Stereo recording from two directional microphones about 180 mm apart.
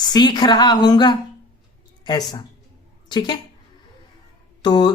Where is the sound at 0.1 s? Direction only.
25° left (ahead or behind).